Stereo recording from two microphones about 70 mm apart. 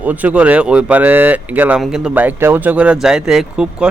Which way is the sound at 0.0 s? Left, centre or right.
Right.